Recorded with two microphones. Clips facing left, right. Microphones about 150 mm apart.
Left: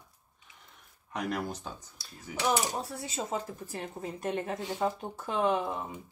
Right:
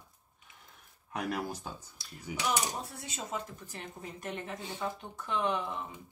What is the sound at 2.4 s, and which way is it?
Speech, 35° left (ahead or behind).